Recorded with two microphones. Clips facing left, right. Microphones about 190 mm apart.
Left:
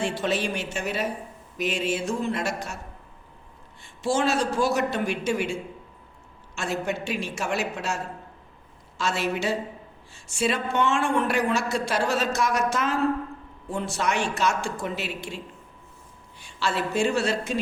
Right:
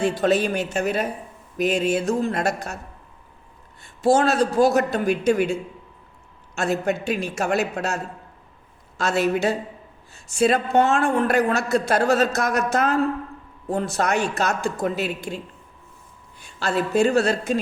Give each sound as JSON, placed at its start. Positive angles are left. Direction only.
{"t": 0.0, "sound": "a man's voice", "side_deg": -40}
{"t": 3.8, "sound": "a man's voice", "side_deg": -40}
{"t": 6.6, "sound": "speech", "side_deg": -40}
{"t": 9.0, "sound": "a man's voice", "side_deg": -40}
{"t": 16.5, "sound": "a man's voice", "side_deg": -45}